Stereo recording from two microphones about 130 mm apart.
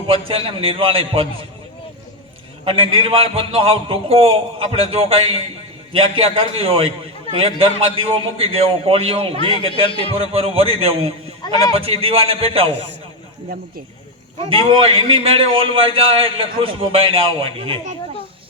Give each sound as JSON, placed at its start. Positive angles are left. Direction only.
{"t": 0.1, "sound": "a man's voice", "side_deg": -45}
{"t": 2.6, "sound": "a man's voice", "side_deg": -45}
{"t": 11.4, "sound": "a man's voice", "side_deg": 30}
{"t": 11.8, "sound": "a man's voice", "side_deg": -45}
{"t": 14.6, "sound": "a man's voice", "side_deg": -45}